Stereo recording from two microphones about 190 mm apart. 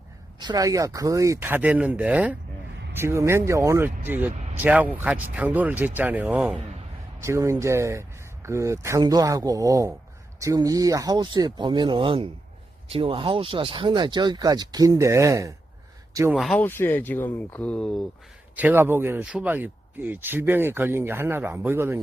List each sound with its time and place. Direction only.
0.3 s speech: 20° right (ahead or behind)
16.3 s speech: centre (ahead or behind)
18.5 s speech: 10° right (ahead or behind)